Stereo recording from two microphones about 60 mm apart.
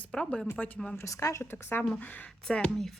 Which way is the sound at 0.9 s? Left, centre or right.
Left.